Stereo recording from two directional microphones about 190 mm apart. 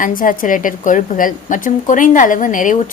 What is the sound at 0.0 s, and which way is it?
A woman's voice, 45° left (ahead or behind).